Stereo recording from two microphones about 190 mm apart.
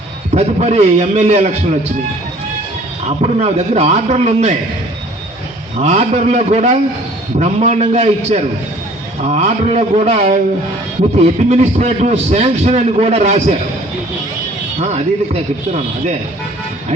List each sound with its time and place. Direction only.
0.3 s a man's voice: 35° right (ahead or behind)
3.2 s a man's voice: 35° right (ahead or behind)
5.7 s a man's voice: 35° right (ahead or behind)
14.8 s a man's voice: 35° right (ahead or behind)